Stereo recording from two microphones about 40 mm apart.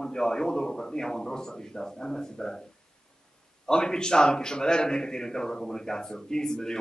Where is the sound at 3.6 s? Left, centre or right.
Centre.